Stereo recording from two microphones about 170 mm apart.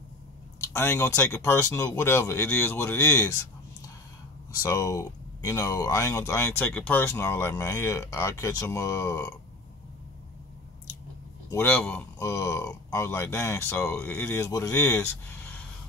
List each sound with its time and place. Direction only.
0.7 s speech: 15° left (ahead or behind)
4.6 s speech: 20° left (ahead or behind)
11.5 s speech: 10° left (ahead or behind)